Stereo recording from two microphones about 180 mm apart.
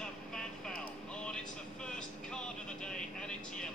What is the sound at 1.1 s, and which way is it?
Vehicle, 5° left (ahead or behind).